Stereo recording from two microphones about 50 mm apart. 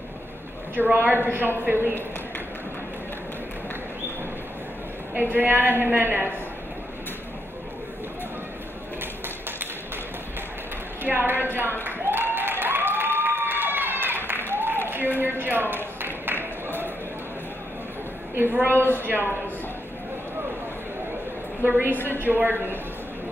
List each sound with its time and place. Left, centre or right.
0.9 s a woman's voice: right
5.1 s a woman's voice: right
11.1 s a woman's voice: right
11.8 s applause: right
14.5 s a sound: right
16.3 s a sound: left
18.3 s a woman's voice: right
21.6 s a woman's voice: right
21.9 s a woman's voice: left
22.2 s a woman's voice: right